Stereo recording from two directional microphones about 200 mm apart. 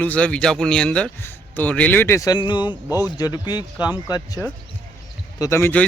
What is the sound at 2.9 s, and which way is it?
Speech, 10° right (ahead or behind).